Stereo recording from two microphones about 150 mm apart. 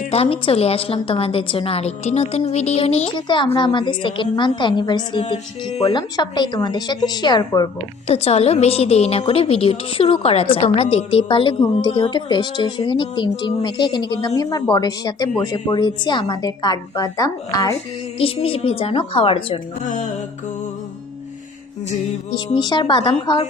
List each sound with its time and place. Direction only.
0.0 s a woman's voice: 40° left (ahead or behind)
3.2 s a woman's voice: 30° left (ahead or behind)
8.0 s a woman's voice: 45° left (ahead or behind); by 17.7 s 25° left (ahead or behind)
18.2 s a woman's voice: 40° left (ahead or behind)
22.5 s a woman's voice: 30° left (ahead or behind)